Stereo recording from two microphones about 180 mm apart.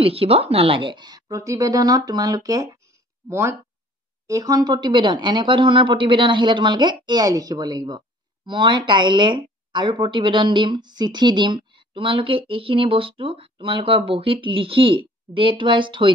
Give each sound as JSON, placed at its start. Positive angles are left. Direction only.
{"t": 0.0, "sound": "speech", "side_deg": -30}